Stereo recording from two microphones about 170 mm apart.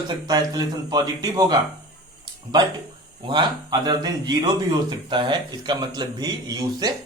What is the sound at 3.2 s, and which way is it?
A man's voice, 25° right (ahead or behind).